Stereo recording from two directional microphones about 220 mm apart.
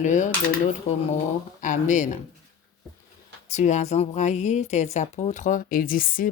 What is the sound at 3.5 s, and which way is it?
A woman's voice, 30° left (ahead or behind).